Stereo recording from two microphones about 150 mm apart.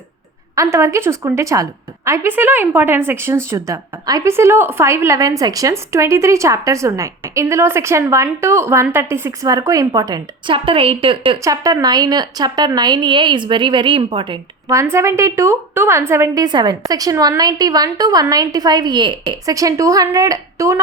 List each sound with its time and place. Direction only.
0.5 s a woman's voice: 20° right (ahead or behind); by 11.3 s 35° right (ahead or behind)
11.4 s a woman's voice: 25° right (ahead or behind)
14.7 s a woman's voice: 20° right (ahead or behind)